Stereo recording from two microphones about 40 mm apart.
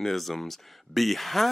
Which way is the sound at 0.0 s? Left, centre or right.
Centre.